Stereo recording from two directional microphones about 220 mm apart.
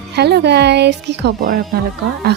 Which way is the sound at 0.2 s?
50° right (ahead or behind).